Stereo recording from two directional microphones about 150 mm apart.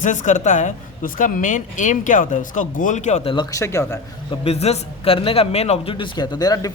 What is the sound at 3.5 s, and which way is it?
Speech, 20° left (ahead or behind).